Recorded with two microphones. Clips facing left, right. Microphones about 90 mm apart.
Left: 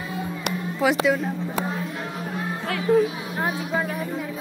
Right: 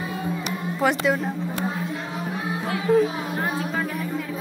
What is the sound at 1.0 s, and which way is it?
Speech, 5° right (ahead or behind).